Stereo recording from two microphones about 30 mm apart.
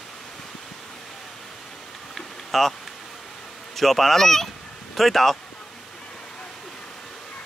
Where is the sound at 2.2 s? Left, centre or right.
Centre.